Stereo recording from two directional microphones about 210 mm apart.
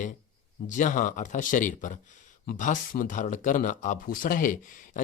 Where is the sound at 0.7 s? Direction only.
35° left (ahead or behind).